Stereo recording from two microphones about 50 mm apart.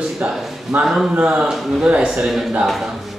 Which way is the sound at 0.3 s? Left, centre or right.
Centre.